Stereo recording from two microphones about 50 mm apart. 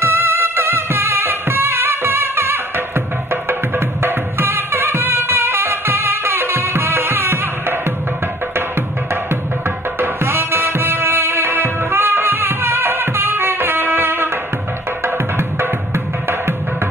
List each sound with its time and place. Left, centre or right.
0.0 s music: right
9.9 s music: right